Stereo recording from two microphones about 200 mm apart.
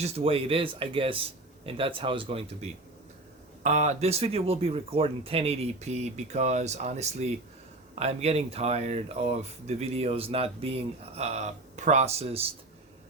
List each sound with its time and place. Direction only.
0.0 s a man's voice: 30° right (ahead or behind)